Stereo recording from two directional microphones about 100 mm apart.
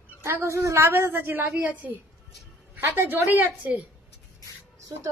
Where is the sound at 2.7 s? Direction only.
25° right (ahead or behind).